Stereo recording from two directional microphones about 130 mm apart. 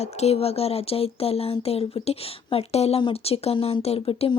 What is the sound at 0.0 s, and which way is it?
Speech, 55° left (ahead or behind).